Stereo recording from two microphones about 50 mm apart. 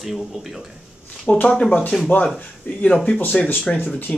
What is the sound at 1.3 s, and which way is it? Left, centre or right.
Speech, left.